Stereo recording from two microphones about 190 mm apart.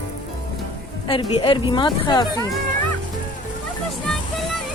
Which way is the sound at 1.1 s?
25° left (ahead or behind).